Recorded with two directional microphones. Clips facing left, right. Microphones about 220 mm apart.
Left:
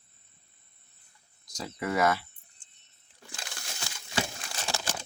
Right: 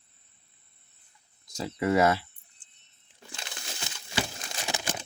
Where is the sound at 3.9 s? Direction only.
20° right (ahead or behind).